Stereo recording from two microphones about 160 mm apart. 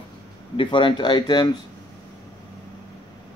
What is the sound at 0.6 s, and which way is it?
Speech, 30° left (ahead or behind).